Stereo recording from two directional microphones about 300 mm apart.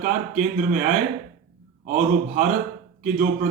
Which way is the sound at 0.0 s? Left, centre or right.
Right.